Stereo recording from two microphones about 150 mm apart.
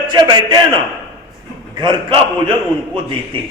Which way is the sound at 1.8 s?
30° right (ahead or behind).